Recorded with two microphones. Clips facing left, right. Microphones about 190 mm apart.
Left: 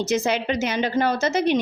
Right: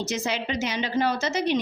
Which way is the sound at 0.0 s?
55° left (ahead or behind).